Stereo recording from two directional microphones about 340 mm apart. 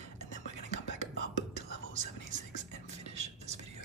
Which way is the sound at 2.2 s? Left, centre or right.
Right.